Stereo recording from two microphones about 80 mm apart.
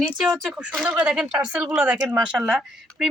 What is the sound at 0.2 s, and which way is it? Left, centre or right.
Fowl, centre.